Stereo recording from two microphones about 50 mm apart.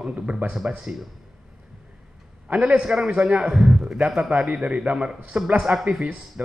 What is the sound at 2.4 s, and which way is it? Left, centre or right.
A man's voice, right.